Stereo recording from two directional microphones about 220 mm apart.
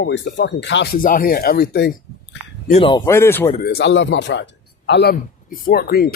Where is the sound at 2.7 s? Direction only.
25° left (ahead or behind).